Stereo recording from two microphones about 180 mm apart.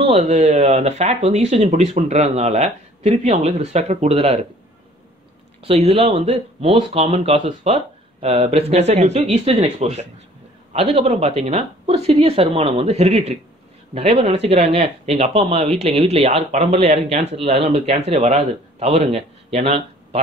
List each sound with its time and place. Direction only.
0.0 s speech: 35° right (ahead or behind)
5.9 s a man's voice: 35° right (ahead or behind)